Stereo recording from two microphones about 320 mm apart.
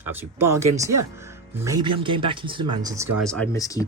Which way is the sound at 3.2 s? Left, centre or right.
Centre.